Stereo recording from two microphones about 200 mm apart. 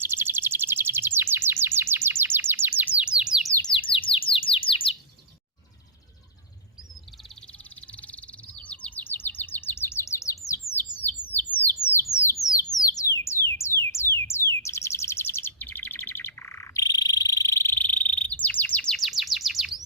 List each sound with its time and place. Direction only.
0.0 s bird: 10° right (ahead or behind)
3.6 s bird: 25° left (ahead or behind)
7.8 s bird: 5° left (ahead or behind)
12.1 s a sound: 15° left (ahead or behind); by 19.8 s centre (ahead or behind)